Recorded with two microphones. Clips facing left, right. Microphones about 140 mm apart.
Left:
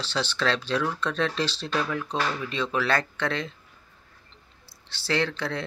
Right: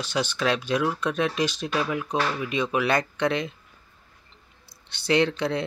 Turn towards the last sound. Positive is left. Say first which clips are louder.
# right 5 dB
turn(degrees=-20)  # may be behind; listen again after turning